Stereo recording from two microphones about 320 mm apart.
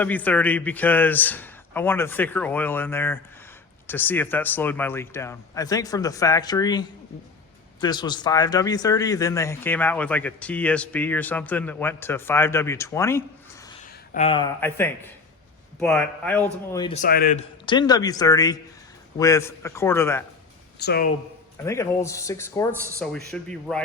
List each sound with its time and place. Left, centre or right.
0.0 s speech: centre
14.1 s speech: centre
17.0 s a man's voice: left
17.7 s speech: centre
20.7 s a man's voice: left
21.6 s speech: centre
22.7 s speech: centre